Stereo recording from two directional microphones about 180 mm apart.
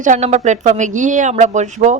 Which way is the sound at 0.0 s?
40° right (ahead or behind).